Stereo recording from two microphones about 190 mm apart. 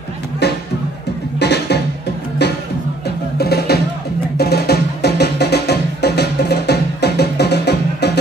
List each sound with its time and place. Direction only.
1.4 s music: 60° left (ahead or behind)
3.3 s music: 55° left (ahead or behind)